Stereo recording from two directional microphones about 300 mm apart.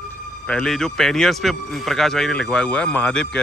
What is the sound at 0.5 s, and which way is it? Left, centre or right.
A man's voice, centre.